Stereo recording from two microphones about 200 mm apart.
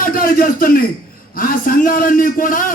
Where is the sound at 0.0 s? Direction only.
45° left (ahead or behind).